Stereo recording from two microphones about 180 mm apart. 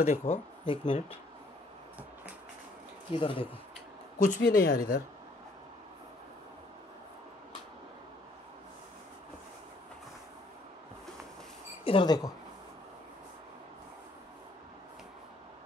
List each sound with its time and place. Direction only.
0.0 s speech: 35° left (ahead or behind)
3.1 s speech: 30° left (ahead or behind)
4.4 s speech: 50° left (ahead or behind)
11.8 s speech: 30° left (ahead or behind)